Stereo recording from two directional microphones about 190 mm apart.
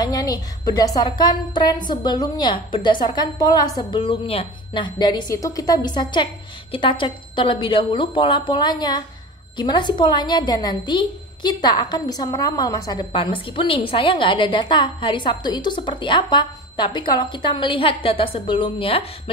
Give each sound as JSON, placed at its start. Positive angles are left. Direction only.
{"t": 0.0, "sound": "a woman's voice", "side_deg": 20}